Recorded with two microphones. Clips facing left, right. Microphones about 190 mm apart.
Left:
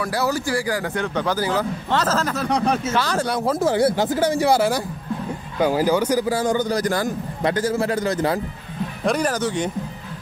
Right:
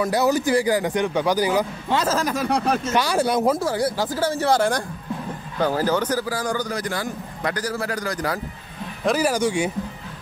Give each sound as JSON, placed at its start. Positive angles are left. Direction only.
{"t": 0.0, "sound": "a man's voice", "side_deg": -20}
{"t": 3.5, "sound": "speech", "side_deg": 20}
{"t": 6.2, "sound": "speech", "side_deg": 25}
{"t": 6.7, "sound": "a man's voice", "side_deg": 40}
{"t": 7.4, "sound": "speech", "side_deg": 25}
{"t": 9.0, "sound": "a man's voice", "side_deg": -5}